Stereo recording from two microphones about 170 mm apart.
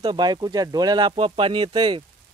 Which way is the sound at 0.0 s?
25° right (ahead or behind).